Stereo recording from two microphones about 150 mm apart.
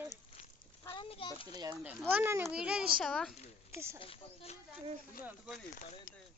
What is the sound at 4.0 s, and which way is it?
Speech, 40° left (ahead or behind).